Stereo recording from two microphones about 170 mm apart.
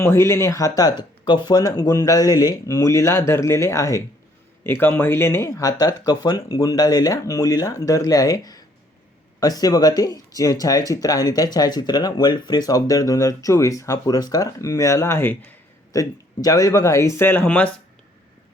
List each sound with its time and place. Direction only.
0.0 s speech: 15° left (ahead or behind)